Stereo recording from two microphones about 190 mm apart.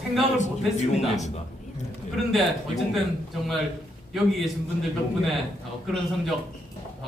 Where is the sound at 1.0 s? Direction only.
35° left (ahead or behind).